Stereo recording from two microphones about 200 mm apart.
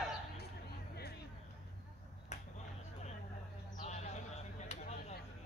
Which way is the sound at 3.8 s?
35° left (ahead or behind).